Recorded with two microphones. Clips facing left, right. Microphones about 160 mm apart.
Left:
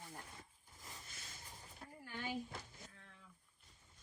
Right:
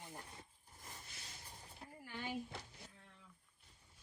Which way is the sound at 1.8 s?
10° right (ahead or behind).